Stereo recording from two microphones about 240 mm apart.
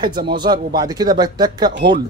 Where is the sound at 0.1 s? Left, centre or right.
Right.